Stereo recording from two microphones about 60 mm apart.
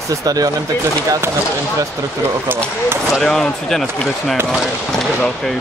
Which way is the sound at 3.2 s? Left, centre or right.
Centre.